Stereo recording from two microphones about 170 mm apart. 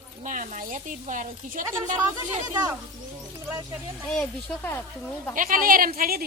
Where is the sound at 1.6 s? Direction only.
15° right (ahead or behind).